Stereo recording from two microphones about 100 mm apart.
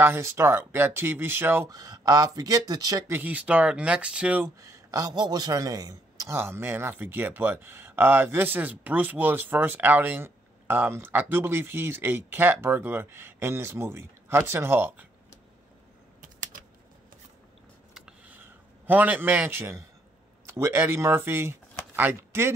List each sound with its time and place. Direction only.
0.0 s a man's voice: 25° right (ahead or behind)
1.7 s speech: 40° right (ahead or behind)
3.1 s speech: 15° right (ahead or behind)
4.6 s a man's voice: 35° right (ahead or behind)
17.9 s a sound: 10° right (ahead or behind)
20.4 s a man's voice: 25° right (ahead or behind)